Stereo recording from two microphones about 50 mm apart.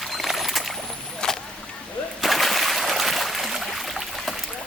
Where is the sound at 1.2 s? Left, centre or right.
Centre.